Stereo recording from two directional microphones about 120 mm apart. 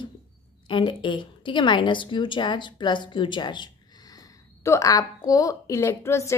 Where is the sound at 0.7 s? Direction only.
45° left (ahead or behind).